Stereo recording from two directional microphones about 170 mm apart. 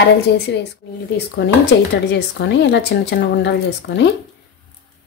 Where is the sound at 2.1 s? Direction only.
90° left.